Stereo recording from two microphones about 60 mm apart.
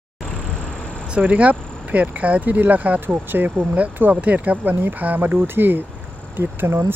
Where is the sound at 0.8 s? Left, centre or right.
Centre.